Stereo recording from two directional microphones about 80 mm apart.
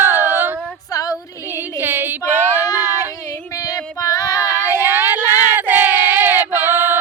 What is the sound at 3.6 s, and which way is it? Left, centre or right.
Child singing, left.